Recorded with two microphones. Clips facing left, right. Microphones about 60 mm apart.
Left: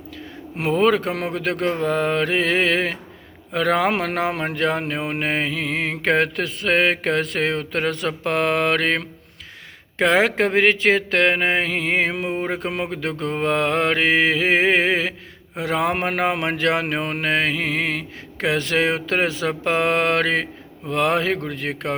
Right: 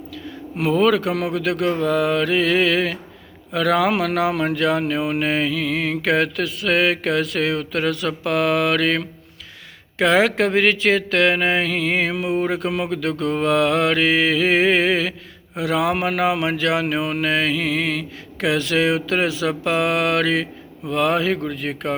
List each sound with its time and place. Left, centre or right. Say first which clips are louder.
0.6 s speech: right 1 dB; left